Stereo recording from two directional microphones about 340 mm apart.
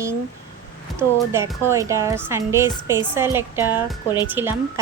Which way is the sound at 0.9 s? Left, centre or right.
Centre.